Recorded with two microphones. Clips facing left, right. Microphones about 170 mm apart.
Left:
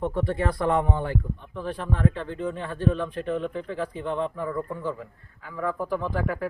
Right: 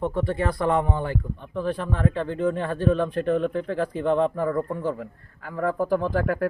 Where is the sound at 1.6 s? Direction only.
65° right (ahead or behind).